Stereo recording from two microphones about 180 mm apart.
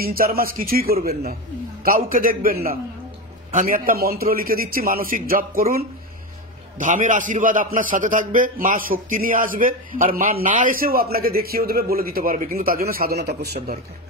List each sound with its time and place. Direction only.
0.0 s a man's voice: 55° right (ahead or behind)